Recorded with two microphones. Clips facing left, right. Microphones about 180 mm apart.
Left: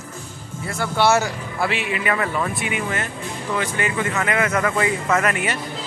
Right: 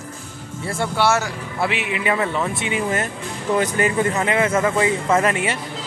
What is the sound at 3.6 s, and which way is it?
Speech, 40° right (ahead or behind).